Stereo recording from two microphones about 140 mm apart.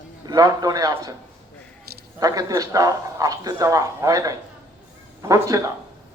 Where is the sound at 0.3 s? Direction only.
25° right (ahead or behind).